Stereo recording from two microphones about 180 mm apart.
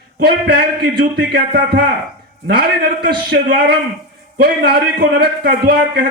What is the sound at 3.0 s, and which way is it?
A man's voice, 65° right (ahead or behind).